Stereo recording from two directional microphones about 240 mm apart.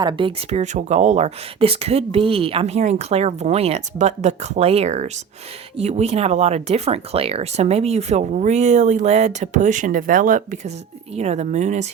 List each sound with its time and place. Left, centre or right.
0.0 s speech: centre